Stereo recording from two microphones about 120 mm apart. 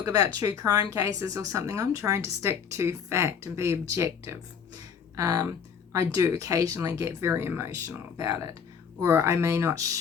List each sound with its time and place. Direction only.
0.0 s speech: 30° right (ahead or behind)